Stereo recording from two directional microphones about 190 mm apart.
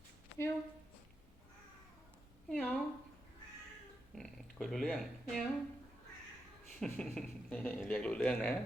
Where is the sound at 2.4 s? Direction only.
5° left (ahead or behind).